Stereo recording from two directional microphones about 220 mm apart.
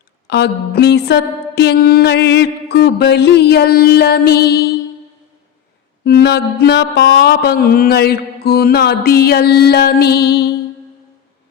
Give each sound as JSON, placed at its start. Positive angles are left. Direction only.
{"t": 0.3, "sound": "mantra", "side_deg": 50}
{"t": 6.1, "sound": "mantra", "side_deg": 50}